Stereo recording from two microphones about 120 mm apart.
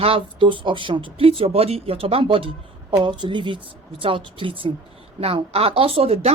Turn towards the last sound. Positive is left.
turn(degrees=-55)  # may be behind; listen again after turning